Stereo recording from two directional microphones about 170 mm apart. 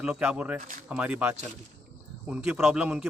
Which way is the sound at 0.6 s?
55° right (ahead or behind).